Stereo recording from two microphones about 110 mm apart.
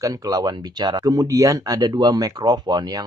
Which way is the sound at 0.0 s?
35° right (ahead or behind).